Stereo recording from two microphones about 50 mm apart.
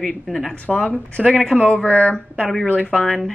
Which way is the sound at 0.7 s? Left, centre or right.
Left.